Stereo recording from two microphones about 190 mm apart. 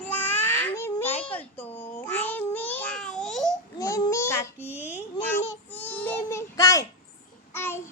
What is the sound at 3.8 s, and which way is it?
Child singing, 15° left (ahead or behind).